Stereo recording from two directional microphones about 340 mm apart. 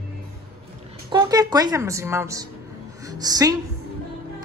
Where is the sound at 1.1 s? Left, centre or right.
Centre.